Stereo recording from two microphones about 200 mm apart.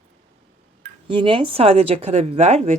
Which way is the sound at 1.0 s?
25° right (ahead or behind).